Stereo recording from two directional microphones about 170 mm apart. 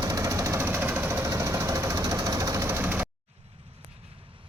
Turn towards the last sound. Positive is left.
turn(degrees=-10)  # may be behind; listen again after turning